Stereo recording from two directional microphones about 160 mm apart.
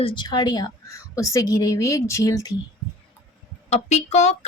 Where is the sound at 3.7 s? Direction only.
45° left (ahead or behind).